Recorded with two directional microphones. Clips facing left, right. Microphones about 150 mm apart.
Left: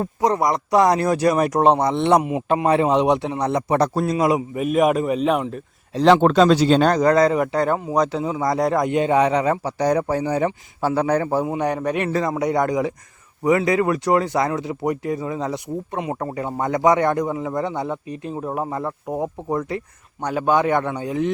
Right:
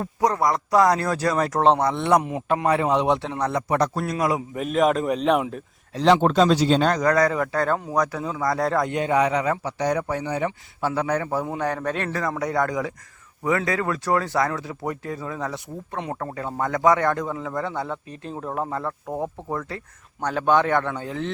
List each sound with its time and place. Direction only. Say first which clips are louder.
0.0 s speech: left 2 dB; 25° left (ahead or behind)
3.8 s speech: left 5 dB; 30° left (ahead or behind)
4.4 s a man's voice: left 3 dB; 10° left (ahead or behind)
6.0 s speech: left 3 dB; 60° left (ahead or behind)
7.0 s a man's voice: left 4 dB; 25° left (ahead or behind)
11.4 s speech: left 4 dB; 15° left (ahead or behind)